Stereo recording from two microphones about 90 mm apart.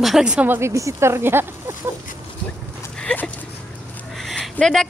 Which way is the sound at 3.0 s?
10° left (ahead or behind).